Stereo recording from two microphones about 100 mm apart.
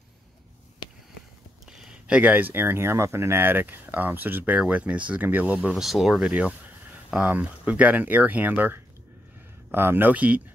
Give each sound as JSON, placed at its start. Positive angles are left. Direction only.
{"t": 1.7, "sound": "speech", "side_deg": -5}